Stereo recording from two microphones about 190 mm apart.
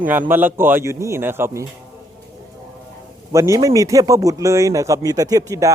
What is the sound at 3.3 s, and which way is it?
Speech, 15° right (ahead or behind).